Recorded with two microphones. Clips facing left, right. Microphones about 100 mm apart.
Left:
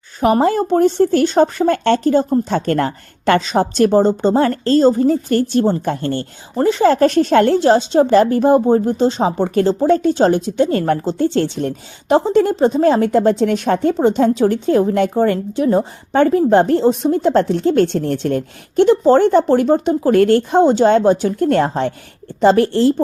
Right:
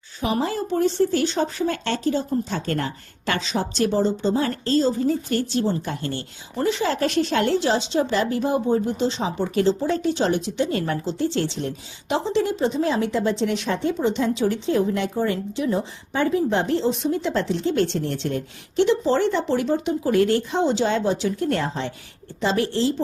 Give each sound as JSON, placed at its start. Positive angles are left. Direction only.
{"t": 0.2, "sound": "speech", "side_deg": 55}